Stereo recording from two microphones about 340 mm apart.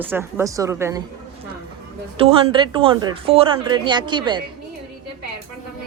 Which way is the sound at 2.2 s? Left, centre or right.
Centre.